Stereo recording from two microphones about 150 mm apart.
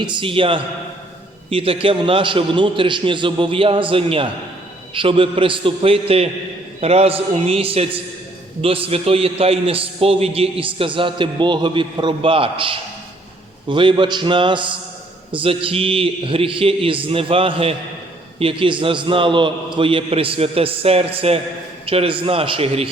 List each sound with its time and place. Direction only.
0.0 s a man's voice: 30° right (ahead or behind)